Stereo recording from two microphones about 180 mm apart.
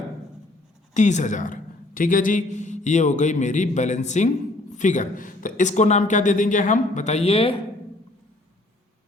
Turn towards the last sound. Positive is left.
turn(degrees=30)  # may be behind; listen again after turning